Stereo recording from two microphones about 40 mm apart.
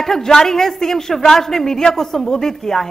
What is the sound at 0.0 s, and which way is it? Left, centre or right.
Speech, centre.